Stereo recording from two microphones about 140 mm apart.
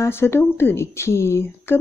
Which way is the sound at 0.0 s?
15° left (ahead or behind).